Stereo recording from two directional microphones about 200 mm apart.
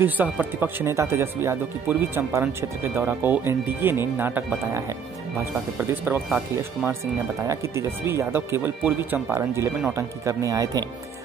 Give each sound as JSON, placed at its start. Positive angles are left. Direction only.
{"t": 0.0, "sound": "speech", "side_deg": -10}